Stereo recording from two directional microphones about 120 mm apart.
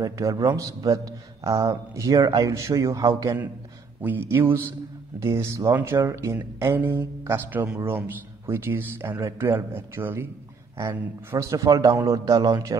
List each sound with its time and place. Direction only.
0.0 s a man's voice: 30° right (ahead or behind)
4.0 s a man's voice: 15° right (ahead or behind)
11.3 s a man's voice: 25° right (ahead or behind)